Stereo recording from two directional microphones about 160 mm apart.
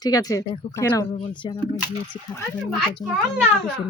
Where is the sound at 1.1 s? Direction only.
35° left (ahead or behind).